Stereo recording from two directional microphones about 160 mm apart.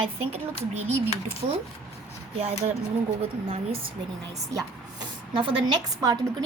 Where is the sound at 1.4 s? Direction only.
30° right (ahead or behind).